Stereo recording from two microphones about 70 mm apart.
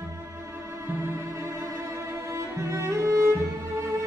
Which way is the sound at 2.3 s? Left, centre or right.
Right.